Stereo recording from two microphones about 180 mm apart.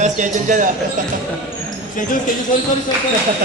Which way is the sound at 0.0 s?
45° right (ahead or behind).